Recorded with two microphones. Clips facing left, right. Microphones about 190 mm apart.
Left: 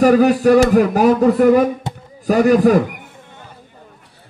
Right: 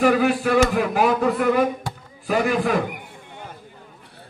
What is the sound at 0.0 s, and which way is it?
Speech, 40° left (ahead or behind).